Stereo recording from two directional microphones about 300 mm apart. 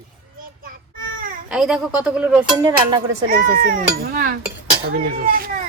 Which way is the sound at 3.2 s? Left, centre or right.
Right.